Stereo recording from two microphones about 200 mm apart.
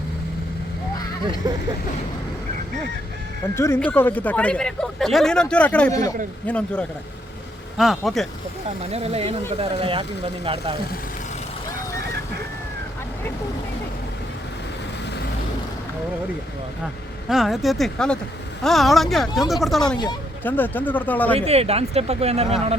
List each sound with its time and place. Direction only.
3.5 s speech: 15° left (ahead or behind)
8.9 s speech: 30° right (ahead or behind)
17.2 s speech: centre (ahead or behind)
21.3 s speech: 30° right (ahead or behind)